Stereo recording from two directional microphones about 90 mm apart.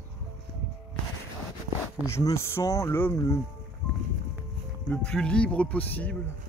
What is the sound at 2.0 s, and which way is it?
Speech, 35° left (ahead or behind).